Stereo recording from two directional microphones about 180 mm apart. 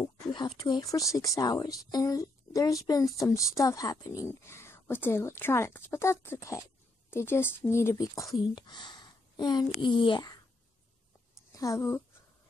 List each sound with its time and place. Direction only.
0.3 s speech: 25° left (ahead or behind)
11.5 s speech: 20° left (ahead or behind)